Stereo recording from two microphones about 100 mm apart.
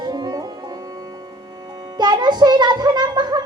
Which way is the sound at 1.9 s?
45° right (ahead or behind).